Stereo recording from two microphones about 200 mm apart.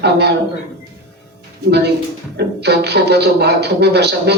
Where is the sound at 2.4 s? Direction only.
55° right (ahead or behind).